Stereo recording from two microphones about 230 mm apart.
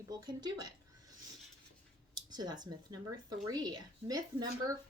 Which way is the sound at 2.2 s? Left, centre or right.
Centre.